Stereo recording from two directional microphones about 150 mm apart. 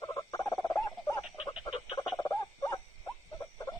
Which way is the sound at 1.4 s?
35° left (ahead or behind).